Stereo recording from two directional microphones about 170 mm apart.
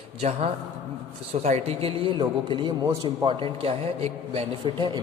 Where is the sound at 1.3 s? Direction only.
40° right (ahead or behind).